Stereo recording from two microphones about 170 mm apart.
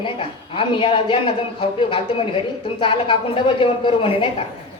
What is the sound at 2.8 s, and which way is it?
A woman's voice, 30° left (ahead or behind).